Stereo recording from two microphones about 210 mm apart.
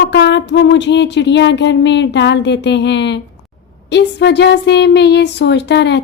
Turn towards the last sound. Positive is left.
turn(degrees=55)  # may be behind; listen again after turning